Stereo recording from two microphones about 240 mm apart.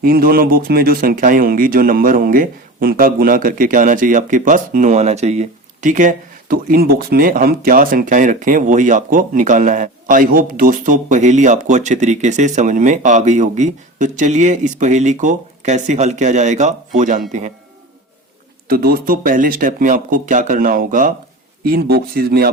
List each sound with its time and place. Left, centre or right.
0.0 s speech: right
18.7 s speech: right